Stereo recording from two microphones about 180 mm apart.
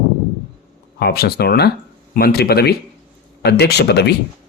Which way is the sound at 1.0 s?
60° left (ahead or behind).